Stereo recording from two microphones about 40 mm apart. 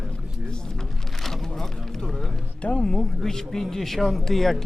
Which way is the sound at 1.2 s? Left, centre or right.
Centre.